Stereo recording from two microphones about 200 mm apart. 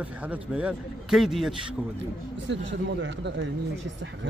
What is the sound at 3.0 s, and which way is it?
Speech, 65° right (ahead or behind).